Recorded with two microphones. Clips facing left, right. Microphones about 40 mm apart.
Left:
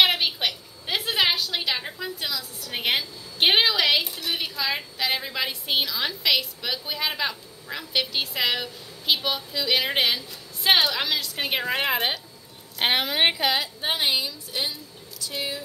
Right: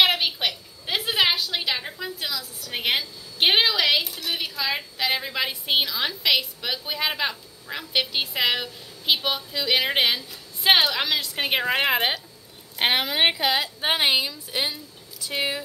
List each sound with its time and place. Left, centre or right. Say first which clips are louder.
0.0 s a woman's voice: even; centre
13.7 s a woman's voice: right 3 dB; right